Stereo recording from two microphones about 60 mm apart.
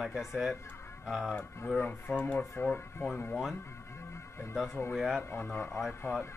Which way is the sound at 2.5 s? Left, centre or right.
Left.